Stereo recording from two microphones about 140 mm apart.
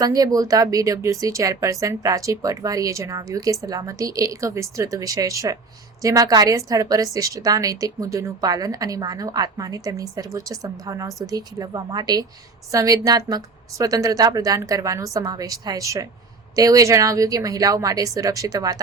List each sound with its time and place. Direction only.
0.0 s a woman's voice: 25° right (ahead or behind)